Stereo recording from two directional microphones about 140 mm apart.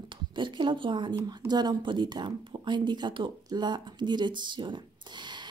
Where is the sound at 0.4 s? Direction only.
35° right (ahead or behind).